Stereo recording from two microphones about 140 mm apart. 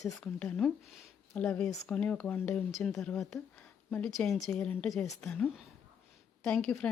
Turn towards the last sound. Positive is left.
turn(degrees=5)  # may be behind; listen again after turning